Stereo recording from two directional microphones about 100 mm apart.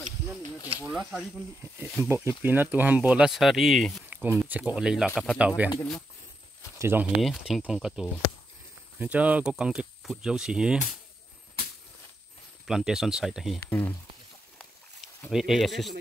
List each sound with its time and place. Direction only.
0.8 s speech: 5° right (ahead or behind)
2.0 s speech: 25° right (ahead or behind); by 4.0 s centre (ahead or behind)
4.1 s a sound: 20° right (ahead or behind)
4.5 s speech: 15° right (ahead or behind)
5.1 s speech: 5° left (ahead or behind)
5.6 s speech: 15° right (ahead or behind)
6.8 s speech: 20° right (ahead or behind)
7.2 s speech: centre (ahead or behind)
12.6 s speech: 5° right (ahead or behind)
13.7 s speech: 20° left (ahead or behind)
15.3 s speech: 5° right (ahead or behind)